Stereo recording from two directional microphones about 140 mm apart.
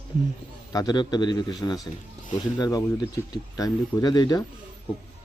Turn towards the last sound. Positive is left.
turn(degrees=30)  # may be behind; listen again after turning